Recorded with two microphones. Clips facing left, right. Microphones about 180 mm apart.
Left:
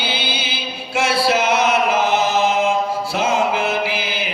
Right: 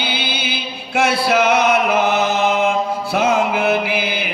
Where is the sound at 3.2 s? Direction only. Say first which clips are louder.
Right 2 dB; 60° right (ahead or behind).